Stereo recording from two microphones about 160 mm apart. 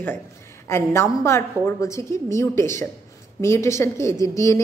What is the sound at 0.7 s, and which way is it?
A woman's voice, 15° left (ahead or behind).